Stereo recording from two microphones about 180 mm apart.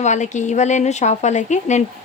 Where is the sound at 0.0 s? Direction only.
40° left (ahead or behind).